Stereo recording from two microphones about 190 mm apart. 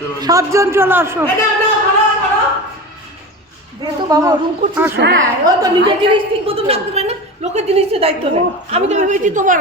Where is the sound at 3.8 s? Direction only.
20° right (ahead or behind).